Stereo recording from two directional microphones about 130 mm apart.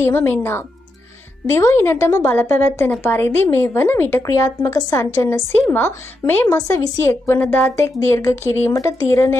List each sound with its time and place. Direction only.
0.0 s a woman's voice: 20° left (ahead or behind)